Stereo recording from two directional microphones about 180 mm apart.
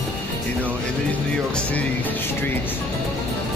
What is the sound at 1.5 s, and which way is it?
Speech, 10° left (ahead or behind).